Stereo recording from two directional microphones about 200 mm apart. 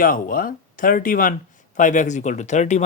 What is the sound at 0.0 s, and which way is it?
Speech, 45° left (ahead or behind).